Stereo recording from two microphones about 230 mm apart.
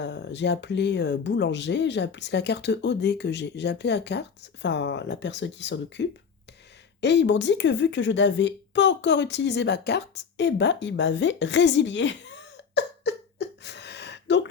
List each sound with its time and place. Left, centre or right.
0.0 s a woman's voice: left